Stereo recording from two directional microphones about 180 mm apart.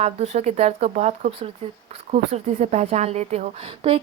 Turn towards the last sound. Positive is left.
turn(degrees=-30)  # may be behind; listen again after turning